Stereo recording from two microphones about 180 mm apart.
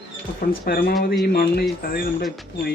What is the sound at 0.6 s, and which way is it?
Speech, 60° left (ahead or behind).